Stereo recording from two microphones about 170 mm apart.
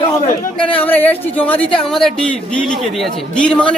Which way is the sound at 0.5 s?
10° left (ahead or behind).